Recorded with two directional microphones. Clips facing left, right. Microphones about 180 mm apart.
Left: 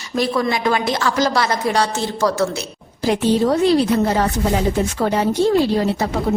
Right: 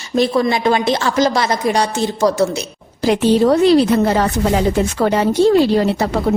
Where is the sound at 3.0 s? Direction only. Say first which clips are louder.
Right 4 dB; 85° right.